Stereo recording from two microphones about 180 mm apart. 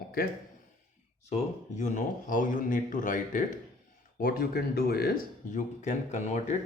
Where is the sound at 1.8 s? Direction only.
45° left (ahead or behind).